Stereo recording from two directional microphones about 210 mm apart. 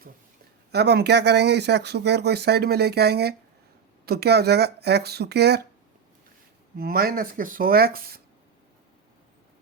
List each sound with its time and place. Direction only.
0.7 s speech: 50° right (ahead or behind)
6.7 s speech: 45° right (ahead or behind)